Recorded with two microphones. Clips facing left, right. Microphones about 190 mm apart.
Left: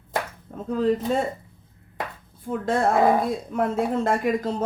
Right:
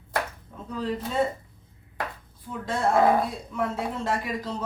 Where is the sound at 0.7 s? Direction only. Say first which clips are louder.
Left 8 dB; 50° left (ahead or behind).